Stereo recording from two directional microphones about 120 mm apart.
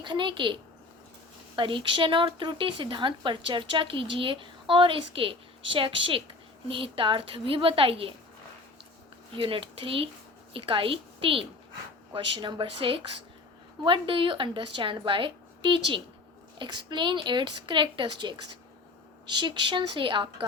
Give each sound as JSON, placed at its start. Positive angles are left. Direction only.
{"t": 0.0, "sound": "speech", "side_deg": -40}
{"t": 9.3, "sound": "a woman's voice", "side_deg": -45}